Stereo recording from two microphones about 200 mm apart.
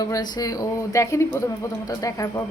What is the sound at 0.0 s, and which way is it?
Speech, 20° left (ahead or behind).